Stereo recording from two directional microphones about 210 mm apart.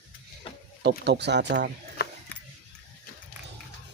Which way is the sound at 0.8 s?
50° right (ahead or behind).